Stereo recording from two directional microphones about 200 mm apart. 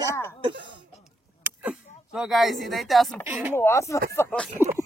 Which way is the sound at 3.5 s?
15° left (ahead or behind).